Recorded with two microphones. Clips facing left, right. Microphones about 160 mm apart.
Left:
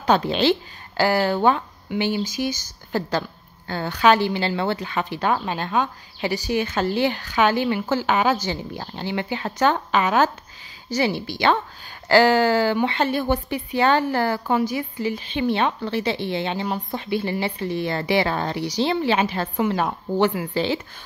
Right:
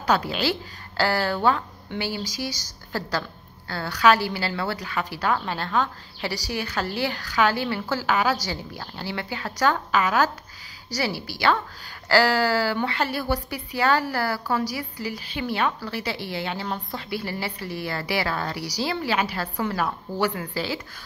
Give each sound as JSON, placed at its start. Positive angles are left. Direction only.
{"t": 0.0, "sound": "speech", "side_deg": 25}